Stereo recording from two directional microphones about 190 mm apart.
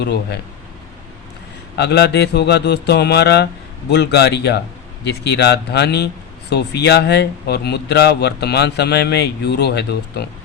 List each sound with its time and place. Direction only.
0.0 s speech: 60° left (ahead or behind)
1.7 s speech: 60° left (ahead or behind)